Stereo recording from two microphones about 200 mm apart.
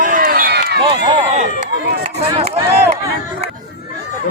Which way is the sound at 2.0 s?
30° right (ahead or behind).